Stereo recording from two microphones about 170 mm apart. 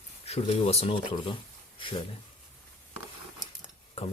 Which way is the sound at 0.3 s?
35° left (ahead or behind).